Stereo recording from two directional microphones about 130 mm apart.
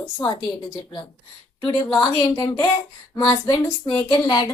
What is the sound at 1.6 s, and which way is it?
A woman's voice, 35° left (ahead or behind).